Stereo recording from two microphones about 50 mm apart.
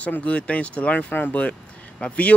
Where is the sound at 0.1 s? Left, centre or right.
Left.